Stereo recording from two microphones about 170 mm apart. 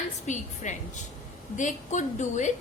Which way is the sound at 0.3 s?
45° left (ahead or behind).